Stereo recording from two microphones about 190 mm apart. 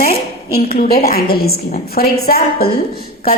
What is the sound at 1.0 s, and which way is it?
A woman's voice, 50° left (ahead or behind).